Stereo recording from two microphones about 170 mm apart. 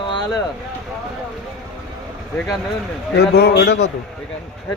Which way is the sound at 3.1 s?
75° left (ahead or behind).